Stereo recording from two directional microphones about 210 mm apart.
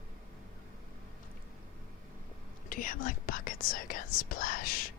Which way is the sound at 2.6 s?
40° left (ahead or behind).